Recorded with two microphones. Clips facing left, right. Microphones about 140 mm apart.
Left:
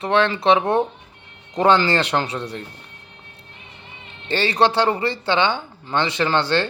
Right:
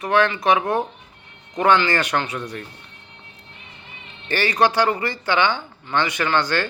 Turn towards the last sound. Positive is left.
turn(degrees=25)  # may be behind; listen again after turning